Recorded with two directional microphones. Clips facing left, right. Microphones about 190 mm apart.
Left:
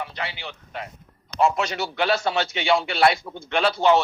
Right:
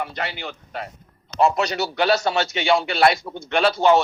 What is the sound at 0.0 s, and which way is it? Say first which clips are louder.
A man's voice: right 4 dB; 45° right (ahead or behind).